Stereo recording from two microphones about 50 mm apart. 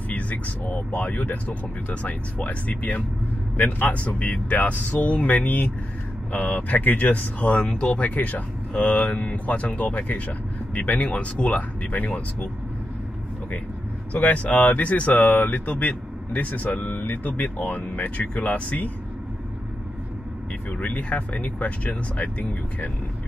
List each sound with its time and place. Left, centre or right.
0.1 s speech: left
14.1 s speech: left
20.7 s speech: left